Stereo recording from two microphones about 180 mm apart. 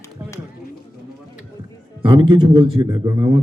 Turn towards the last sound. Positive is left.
turn(degrees=-25)  # may be behind; listen again after turning